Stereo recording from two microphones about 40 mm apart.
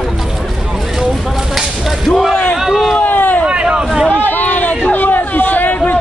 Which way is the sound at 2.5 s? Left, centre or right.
Centre.